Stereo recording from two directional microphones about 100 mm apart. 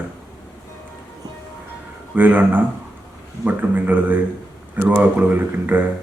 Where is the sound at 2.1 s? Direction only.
15° right (ahead or behind).